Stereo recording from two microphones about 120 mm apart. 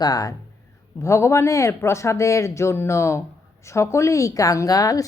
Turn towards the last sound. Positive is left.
turn(degrees=30)  # may be behind; listen again after turning